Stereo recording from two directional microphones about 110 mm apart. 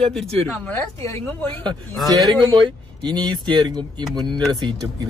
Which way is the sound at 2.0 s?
35° right (ahead or behind).